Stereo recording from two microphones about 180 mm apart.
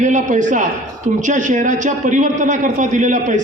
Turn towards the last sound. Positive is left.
turn(degrees=-45)  # may be behind; listen again after turning